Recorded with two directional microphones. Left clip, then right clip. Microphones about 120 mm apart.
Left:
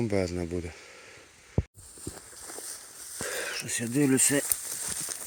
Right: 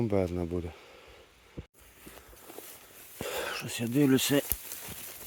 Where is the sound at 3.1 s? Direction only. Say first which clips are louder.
Left 1 dB; 20° right (ahead or behind).